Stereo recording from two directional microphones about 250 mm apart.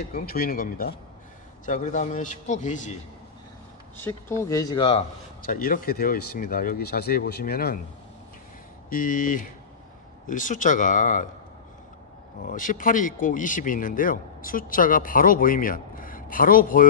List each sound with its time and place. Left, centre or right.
0.1 s a man's voice: left
4.4 s speech: centre
5.4 s speech: left
8.9 s speech: left
12.4 s speech: left